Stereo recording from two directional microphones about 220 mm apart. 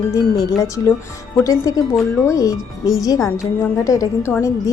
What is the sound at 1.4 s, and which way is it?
A woman's voice, 15° left (ahead or behind).